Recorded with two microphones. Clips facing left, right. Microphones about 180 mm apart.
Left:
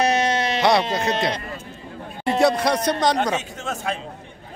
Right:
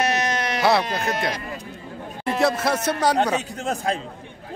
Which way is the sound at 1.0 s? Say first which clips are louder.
Left 2 dB; 25° left (ahead or behind).